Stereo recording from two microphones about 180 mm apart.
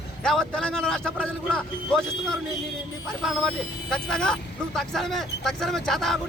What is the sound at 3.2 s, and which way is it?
Speech, centre (ahead or behind).